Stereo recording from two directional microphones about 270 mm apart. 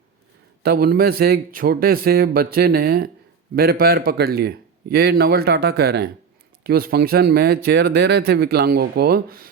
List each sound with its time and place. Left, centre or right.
0.6 s speech: right